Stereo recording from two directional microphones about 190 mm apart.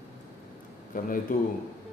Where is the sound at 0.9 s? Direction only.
45° left (ahead or behind).